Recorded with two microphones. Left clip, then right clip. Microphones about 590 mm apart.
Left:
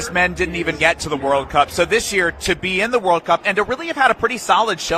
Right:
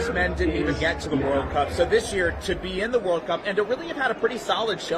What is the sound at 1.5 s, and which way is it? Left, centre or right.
A man's voice, left.